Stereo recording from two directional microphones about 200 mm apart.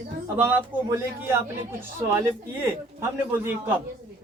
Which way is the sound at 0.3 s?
10° right (ahead or behind).